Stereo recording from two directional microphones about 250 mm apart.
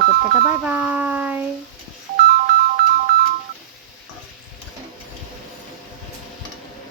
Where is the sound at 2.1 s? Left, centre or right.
Right.